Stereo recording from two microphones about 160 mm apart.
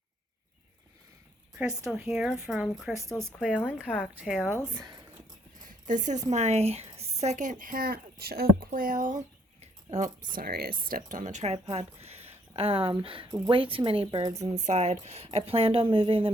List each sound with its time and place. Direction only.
1.8 s speech: 5° right (ahead or behind)
3.8 s speech: 5° left (ahead or behind)
4.1 s speech: 5° right (ahead or behind)
4.7 s speech: 25° right (ahead or behind)
5.6 s a woman's voice: 50° right (ahead or behind)
10.3 s speech: 70° right (ahead or behind); by 14.6 s 25° right (ahead or behind)
14.6 s speech: 45° right (ahead or behind)